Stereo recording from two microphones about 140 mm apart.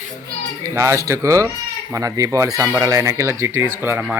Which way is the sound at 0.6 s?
20° right (ahead or behind).